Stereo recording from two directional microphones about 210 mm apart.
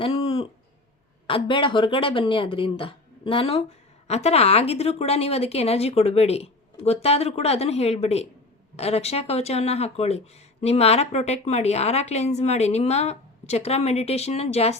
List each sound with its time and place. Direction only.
0.0 s owl: 25° left (ahead or behind)
1.3 s speech: 25° left (ahead or behind)